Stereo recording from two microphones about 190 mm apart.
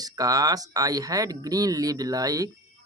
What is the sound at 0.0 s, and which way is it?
Speech, 20° right (ahead or behind).